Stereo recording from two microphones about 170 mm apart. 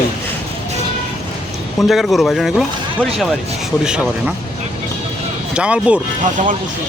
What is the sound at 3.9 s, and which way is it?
Speech, 5° right (ahead or behind).